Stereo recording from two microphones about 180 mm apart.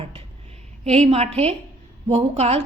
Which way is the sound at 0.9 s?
35° right (ahead or behind).